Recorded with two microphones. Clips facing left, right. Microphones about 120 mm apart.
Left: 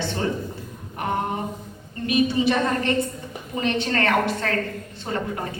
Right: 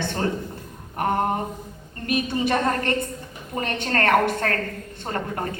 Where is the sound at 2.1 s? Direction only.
50° right (ahead or behind).